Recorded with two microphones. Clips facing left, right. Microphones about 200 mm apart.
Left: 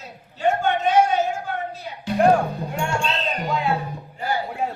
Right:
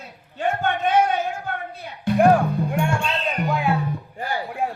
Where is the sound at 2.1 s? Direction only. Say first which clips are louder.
Right 3 dB; 55° right (ahead or behind).